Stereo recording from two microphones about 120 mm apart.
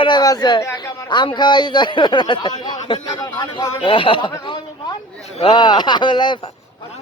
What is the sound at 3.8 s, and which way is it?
Speech, 45° left (ahead or behind).